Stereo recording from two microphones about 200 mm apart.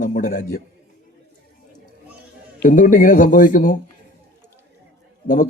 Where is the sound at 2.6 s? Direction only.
40° left (ahead or behind).